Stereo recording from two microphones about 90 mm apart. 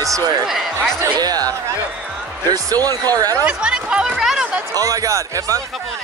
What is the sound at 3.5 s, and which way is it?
Speech, 10° right (ahead or behind).